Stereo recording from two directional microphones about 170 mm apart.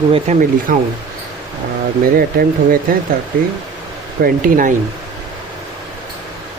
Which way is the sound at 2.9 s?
60° right (ahead or behind).